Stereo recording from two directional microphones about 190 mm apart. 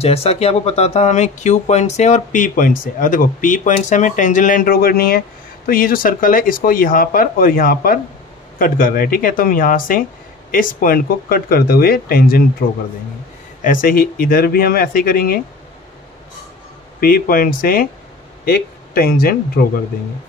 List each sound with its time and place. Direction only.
0.0 s speech: 30° left (ahead or behind); by 12.4 s 50° left (ahead or behind)
13.7 s speech: 50° left (ahead or behind)
17.0 s speech: 50° left (ahead or behind)